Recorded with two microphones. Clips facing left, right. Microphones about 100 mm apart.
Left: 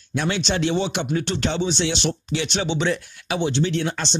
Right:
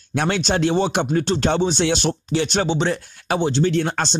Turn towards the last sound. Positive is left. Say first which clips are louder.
# right 4 dB
turn(degrees=-45)  # may be behind; listen again after turning